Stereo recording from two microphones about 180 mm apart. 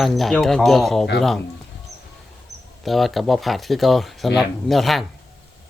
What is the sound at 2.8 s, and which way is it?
Speech, centre (ahead or behind).